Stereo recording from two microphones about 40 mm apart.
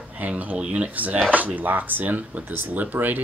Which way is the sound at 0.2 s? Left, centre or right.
Right.